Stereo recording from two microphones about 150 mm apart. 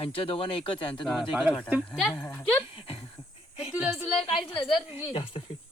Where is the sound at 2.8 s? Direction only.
40° left (ahead or behind).